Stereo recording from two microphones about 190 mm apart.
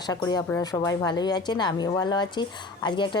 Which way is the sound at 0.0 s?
20° left (ahead or behind).